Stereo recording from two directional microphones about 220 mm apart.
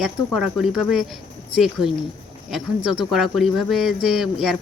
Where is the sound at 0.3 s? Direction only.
Centre (ahead or behind).